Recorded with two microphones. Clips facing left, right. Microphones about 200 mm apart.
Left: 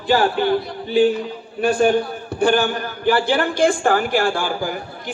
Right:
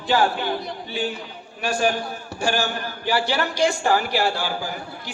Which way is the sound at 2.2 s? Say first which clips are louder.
Left 6 dB; 55° left (ahead or behind).